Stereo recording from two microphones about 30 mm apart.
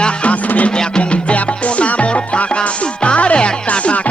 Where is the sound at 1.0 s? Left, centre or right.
Left.